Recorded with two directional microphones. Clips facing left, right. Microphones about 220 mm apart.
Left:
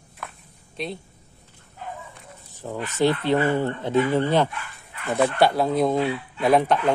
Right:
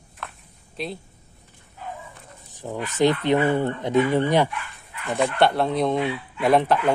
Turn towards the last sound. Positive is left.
turn(degrees=0)  # may be behind; listen again after turning